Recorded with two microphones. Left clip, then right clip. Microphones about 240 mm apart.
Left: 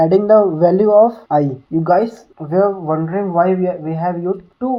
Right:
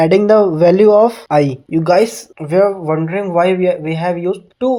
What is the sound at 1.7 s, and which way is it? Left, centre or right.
Speech, right.